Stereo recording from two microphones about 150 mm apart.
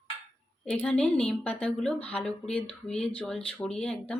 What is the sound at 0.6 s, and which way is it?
Speech, 10° left (ahead or behind).